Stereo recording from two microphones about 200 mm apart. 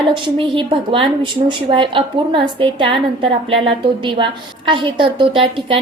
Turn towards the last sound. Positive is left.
turn(degrees=-25)  # may be behind; listen again after turning